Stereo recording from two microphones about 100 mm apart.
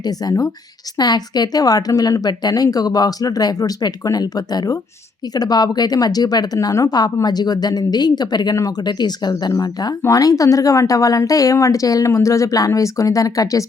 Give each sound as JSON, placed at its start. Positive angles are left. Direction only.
{"t": 0.0, "sound": "speech", "side_deg": 40}